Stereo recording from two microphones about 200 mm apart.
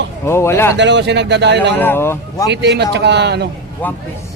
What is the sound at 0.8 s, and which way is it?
Speech, 60° right (ahead or behind).